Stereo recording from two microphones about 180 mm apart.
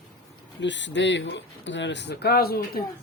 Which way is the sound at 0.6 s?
80° left.